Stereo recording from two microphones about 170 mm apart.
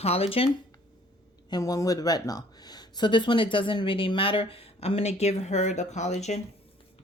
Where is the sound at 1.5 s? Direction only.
25° left (ahead or behind).